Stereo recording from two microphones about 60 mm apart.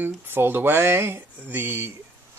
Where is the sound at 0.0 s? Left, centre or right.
Right.